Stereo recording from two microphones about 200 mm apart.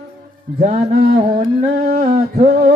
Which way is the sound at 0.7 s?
45° right (ahead or behind).